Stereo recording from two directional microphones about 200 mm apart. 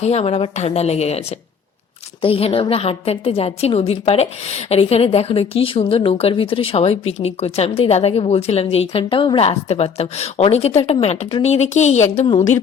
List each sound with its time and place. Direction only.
0.0 s a woman's voice: 30° left (ahead or behind)
2.2 s a woman's voice: 30° left (ahead or behind)